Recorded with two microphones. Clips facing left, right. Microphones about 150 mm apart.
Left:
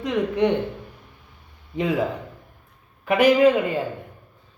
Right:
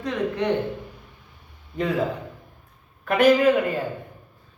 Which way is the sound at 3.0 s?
10° left (ahead or behind).